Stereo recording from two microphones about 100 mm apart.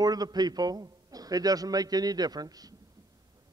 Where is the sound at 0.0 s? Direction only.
40° right (ahead or behind).